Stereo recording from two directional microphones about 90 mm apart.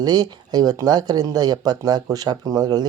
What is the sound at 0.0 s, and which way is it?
Speech, 50° right (ahead or behind).